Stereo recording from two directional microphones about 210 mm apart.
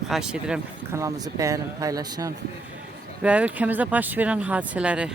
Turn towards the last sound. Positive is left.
turn(degrees=-5)  # may be behind; listen again after turning